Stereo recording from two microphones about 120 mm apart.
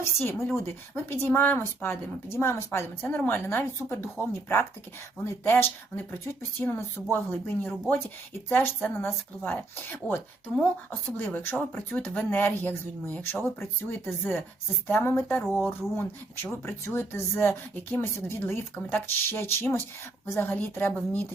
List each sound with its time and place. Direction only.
0.2 s a woman's voice: 20° left (ahead or behind)
11.2 s a woman's voice: 20° left (ahead or behind)